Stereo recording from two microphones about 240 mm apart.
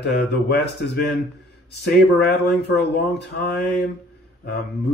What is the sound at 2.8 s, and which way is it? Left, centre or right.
Speech, left.